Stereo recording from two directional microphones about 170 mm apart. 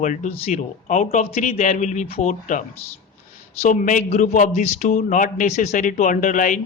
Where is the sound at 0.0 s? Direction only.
45° left (ahead or behind).